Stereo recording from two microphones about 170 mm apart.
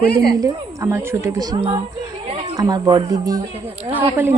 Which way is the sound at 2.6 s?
25° right (ahead or behind).